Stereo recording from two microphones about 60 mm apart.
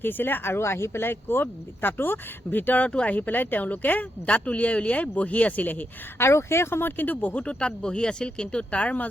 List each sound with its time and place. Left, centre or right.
0.0 s speech: left
6.1 s speech: left